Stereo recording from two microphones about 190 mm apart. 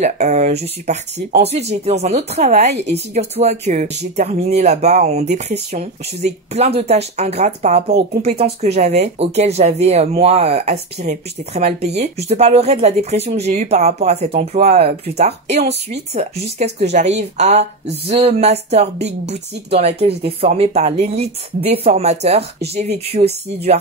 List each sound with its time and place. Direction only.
0.0 s speech: 40° right (ahead or behind)
3.8 s speech: 60° right (ahead or behind)
4.2 s speech: 35° right (ahead or behind)